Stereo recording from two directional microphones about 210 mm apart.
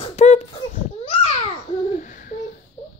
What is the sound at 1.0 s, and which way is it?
Babbling, 25° left (ahead or behind).